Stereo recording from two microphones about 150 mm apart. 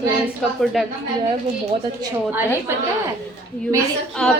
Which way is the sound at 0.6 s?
Centre (ahead or behind).